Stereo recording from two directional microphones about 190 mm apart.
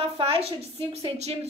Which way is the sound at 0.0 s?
30° right (ahead or behind).